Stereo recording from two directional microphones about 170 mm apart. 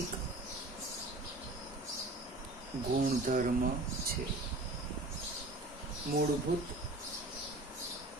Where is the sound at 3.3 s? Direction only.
55° right (ahead or behind).